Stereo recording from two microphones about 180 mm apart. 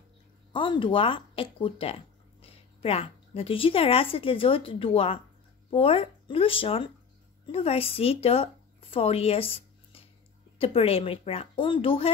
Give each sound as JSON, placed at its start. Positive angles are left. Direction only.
{"t": 0.5, "sound": "a woman's voice", "side_deg": 25}